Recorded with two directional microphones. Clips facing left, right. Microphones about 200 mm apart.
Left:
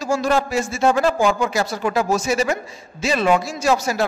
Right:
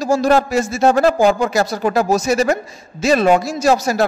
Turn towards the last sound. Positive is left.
turn(degrees=-40)  # may be behind; listen again after turning